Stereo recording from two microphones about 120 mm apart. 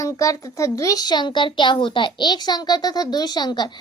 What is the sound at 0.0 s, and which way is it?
A child's voice, 25° left (ahead or behind).